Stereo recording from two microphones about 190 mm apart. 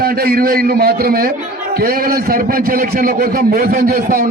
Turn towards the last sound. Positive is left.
turn(degrees=-50)  # may be behind; listen again after turning